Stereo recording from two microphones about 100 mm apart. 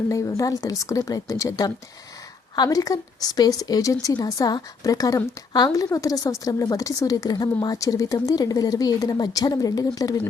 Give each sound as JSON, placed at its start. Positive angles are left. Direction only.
{"t": 0.1, "sound": "a woman's voice", "side_deg": 30}